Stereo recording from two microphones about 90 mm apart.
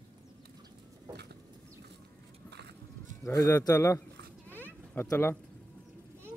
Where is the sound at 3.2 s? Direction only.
40° left (ahead or behind).